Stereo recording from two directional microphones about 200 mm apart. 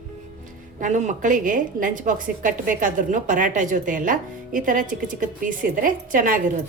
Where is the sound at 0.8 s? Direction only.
35° right (ahead or behind).